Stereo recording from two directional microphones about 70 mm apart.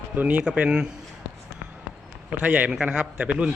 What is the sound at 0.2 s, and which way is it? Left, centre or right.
Speech, centre.